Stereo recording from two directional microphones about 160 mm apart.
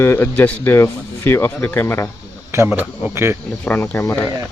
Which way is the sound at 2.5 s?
15° right (ahead or behind).